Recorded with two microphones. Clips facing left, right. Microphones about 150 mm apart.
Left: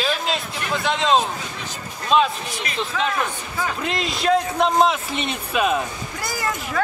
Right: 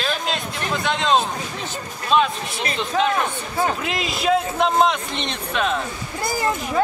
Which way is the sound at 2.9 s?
40° right (ahead or behind).